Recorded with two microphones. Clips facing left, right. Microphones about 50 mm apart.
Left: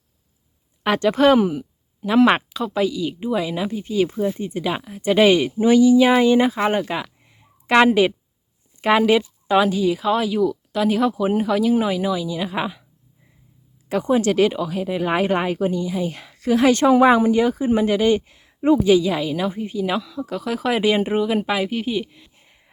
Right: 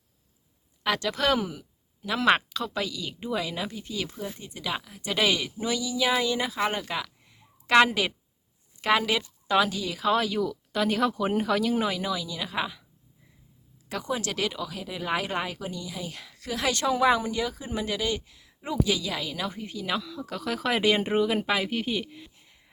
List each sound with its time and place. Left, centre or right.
0.9 s speech: left
10.0 s speech: centre
13.8 s speech: left; by 22.3 s centre
22.4 s a sound: left